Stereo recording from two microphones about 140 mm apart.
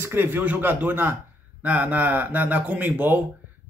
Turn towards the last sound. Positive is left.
turn(degrees=-10)  # may be behind; listen again after turning